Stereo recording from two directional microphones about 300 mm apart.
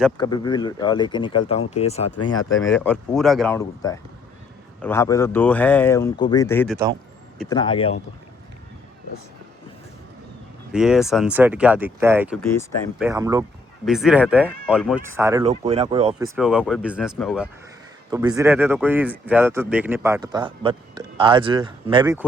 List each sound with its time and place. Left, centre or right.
0.2 s speech: centre
2.0 s speech: left
2.3 s speech: centre
10.7 s speech: centre
13.8 s speech: centre
15.4 s speech: right
16.1 s speech: centre